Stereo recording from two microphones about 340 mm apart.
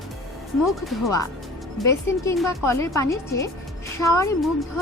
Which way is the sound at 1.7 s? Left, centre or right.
Centre.